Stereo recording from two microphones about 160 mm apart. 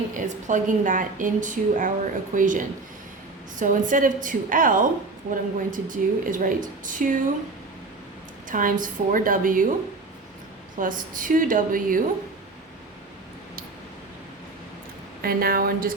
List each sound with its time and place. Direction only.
0.2 s a woman's voice: 50° right (ahead or behind)
8.4 s a woman's voice: 55° right (ahead or behind)
10.8 s a woman's voice: 55° right (ahead or behind)
15.2 s speech: 65° right (ahead or behind)